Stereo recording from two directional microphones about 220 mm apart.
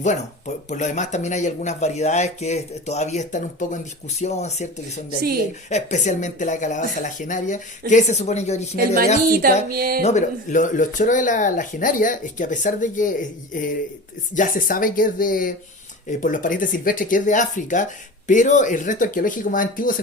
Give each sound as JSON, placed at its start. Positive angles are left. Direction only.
{"t": 0.0, "sound": "speech", "side_deg": 35}
{"t": 9.6, "sound": "speech", "side_deg": -40}
{"t": 10.0, "sound": "speech", "side_deg": 30}